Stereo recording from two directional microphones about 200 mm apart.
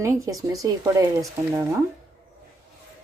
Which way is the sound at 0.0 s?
15° right (ahead or behind).